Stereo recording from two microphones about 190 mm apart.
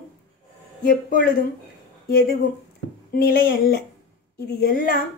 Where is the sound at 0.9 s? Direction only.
45° left (ahead or behind).